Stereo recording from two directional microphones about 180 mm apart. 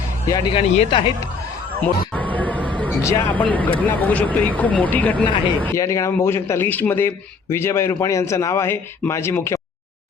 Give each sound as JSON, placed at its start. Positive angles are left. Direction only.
{"t": 0.3, "sound": "speech", "side_deg": 25}
{"t": 1.8, "sound": "a sound", "side_deg": 10}
{"t": 3.0, "sound": "speech", "side_deg": 15}